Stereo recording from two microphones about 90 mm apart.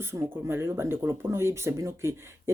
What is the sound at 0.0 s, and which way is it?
Speech, 30° right (ahead or behind).